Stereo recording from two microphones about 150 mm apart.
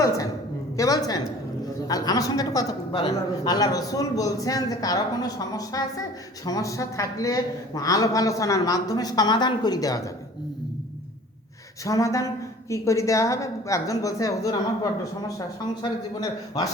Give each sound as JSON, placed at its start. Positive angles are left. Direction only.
{"t": 0.8, "sound": "a man's voice", "side_deg": 25}
{"t": 11.9, "sound": "a man's voice", "side_deg": 20}
{"t": 15.8, "sound": "a man's voice", "side_deg": 25}